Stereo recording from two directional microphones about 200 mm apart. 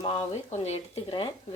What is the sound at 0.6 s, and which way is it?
Speech, 30° left (ahead or behind).